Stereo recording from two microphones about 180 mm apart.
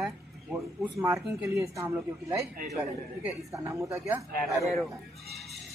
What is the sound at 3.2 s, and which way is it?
Speech, 15° right (ahead or behind).